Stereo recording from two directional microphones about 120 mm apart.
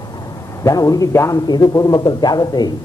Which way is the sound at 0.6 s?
30° left (ahead or behind).